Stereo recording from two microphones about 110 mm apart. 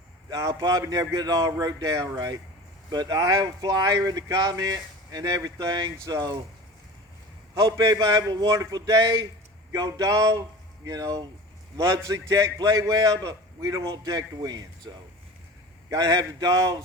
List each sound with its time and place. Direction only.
0.3 s speech: 30° right (ahead or behind)
7.5 s speech: 30° right (ahead or behind)
15.9 s speech: 30° right (ahead or behind)